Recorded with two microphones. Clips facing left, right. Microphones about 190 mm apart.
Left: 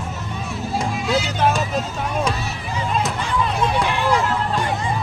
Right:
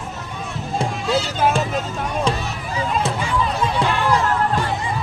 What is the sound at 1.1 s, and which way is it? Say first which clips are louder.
Music: right 1 dB; 10° left (ahead or behind).